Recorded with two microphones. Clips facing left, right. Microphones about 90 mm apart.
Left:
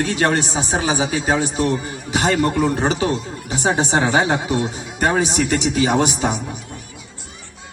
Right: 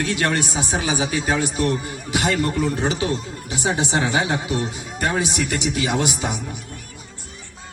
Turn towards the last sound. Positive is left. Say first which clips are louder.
# left 5 dB
turn(degrees=35)  # may be behind; listen again after turning